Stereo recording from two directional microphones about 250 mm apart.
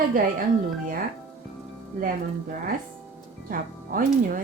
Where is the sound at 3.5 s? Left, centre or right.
Right.